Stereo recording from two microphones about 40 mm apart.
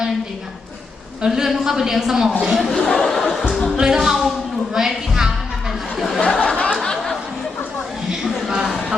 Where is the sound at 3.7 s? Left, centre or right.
Centre.